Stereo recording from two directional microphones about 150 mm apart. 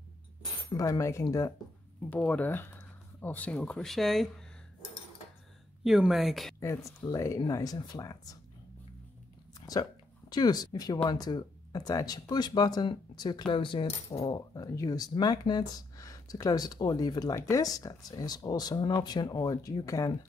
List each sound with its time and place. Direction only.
0.7 s speech: 20° left (ahead or behind)
2.0 s speech: 10° left (ahead or behind)
5.9 s speech: 5° right (ahead or behind)
6.6 s speech: 20° left (ahead or behind)
10.3 s speech: 25° left (ahead or behind)
14.2 s speech: 25° left (ahead or behind)